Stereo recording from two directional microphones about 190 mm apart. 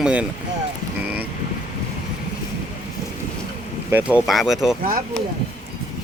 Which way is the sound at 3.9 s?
5° right (ahead or behind).